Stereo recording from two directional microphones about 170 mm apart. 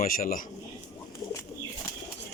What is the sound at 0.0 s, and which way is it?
Speech, 55° left (ahead or behind).